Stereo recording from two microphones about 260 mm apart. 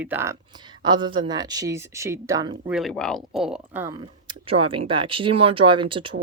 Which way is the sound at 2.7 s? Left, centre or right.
Centre.